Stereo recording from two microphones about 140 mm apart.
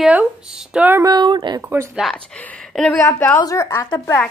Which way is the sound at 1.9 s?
5° left (ahead or behind).